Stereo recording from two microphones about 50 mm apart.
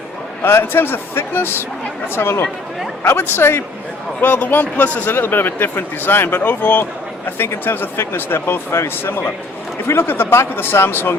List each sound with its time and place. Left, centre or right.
0.4 s speech: left
2.1 s speech: left
4.2 s speech: left
5.1 s speech: left
7.3 s speech: left